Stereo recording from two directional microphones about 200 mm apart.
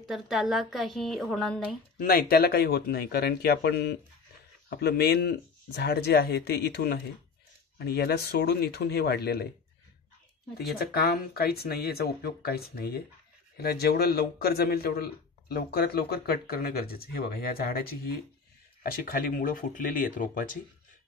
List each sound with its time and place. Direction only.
0.1 s a woman's voice: centre (ahead or behind)
2.0 s a man's voice: 45° left (ahead or behind)
10.8 s a man's voice: 50° left (ahead or behind)